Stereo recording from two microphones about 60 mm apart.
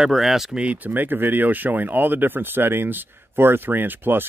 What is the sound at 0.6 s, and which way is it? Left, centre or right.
Speech, right.